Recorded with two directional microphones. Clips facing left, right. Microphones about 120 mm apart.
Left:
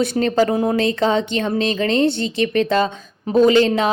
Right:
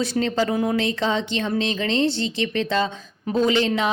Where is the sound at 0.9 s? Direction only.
55° left (ahead or behind).